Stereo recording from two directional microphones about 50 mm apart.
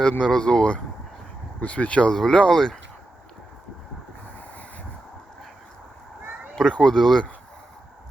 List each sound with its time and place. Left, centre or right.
0.2 s speech: centre
2.1 s speech: centre
6.6 s speech: centre